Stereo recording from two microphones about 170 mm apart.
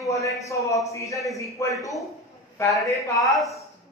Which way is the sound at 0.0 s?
20° left (ahead or behind).